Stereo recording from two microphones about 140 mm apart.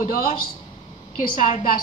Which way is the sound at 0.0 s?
65° left (ahead or behind).